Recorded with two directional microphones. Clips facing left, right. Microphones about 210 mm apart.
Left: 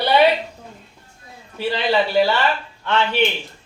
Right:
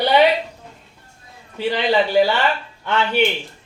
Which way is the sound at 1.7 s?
15° right (ahead or behind).